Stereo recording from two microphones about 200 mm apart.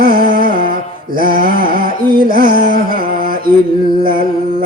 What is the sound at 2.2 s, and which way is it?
Music, 45° right (ahead or behind).